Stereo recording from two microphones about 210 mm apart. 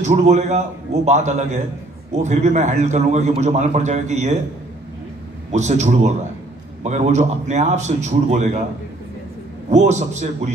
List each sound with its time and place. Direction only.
0.0 s a man's voice: 35° right (ahead or behind)
5.5 s a man's voice: 35° right (ahead or behind)
9.7 s a man's voice: 35° right (ahead or behind)